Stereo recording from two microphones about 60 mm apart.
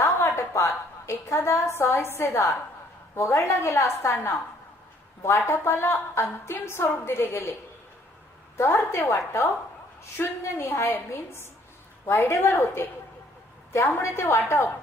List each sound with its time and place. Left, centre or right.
0.0 s a woman's voice: left
5.6 s a woman's voice: left
8.5 s a woman's voice: left
13.9 s a woman's voice: left